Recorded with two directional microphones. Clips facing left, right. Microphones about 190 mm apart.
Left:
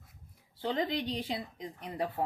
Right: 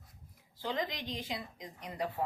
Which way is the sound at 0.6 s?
30° left (ahead or behind).